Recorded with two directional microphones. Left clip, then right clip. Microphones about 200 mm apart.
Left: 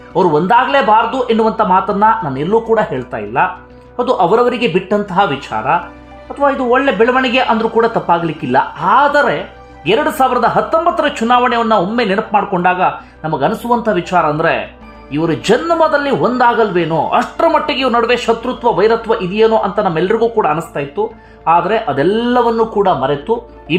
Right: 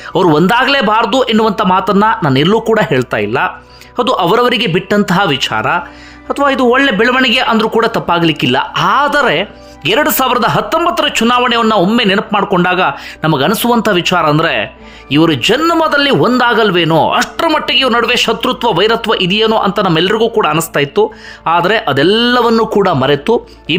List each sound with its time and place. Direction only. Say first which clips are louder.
0.1 s a man's voice: right 1 dB; 30° right (ahead or behind)